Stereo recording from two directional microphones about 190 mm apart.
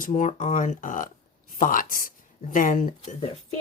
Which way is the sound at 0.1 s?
35° left (ahead or behind).